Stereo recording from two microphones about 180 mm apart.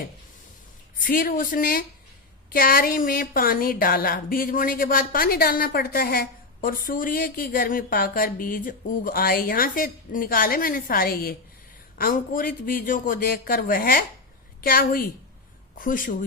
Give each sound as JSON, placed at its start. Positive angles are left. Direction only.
{"t": 0.9, "sound": "speech", "side_deg": 50}